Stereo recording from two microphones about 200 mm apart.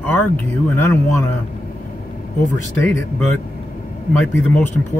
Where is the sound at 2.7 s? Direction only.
10° left (ahead or behind).